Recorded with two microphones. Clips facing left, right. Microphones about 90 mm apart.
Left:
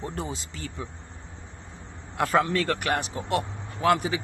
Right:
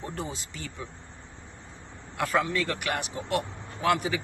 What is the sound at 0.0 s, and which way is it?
Speech, 25° left (ahead or behind).